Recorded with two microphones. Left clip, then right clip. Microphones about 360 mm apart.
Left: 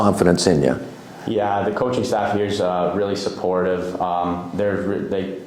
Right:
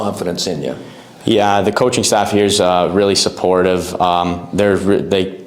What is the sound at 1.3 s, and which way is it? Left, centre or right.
Speech, right.